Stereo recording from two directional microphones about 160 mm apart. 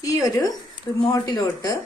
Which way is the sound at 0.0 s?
20° left (ahead or behind).